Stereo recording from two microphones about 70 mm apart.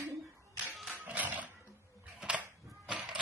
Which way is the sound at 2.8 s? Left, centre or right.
Centre.